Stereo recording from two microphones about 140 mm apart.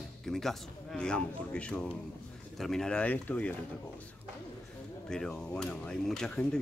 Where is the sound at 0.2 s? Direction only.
Centre (ahead or behind).